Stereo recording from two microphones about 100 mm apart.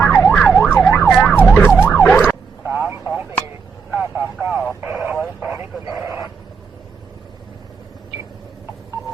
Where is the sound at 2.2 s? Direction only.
15° right (ahead or behind).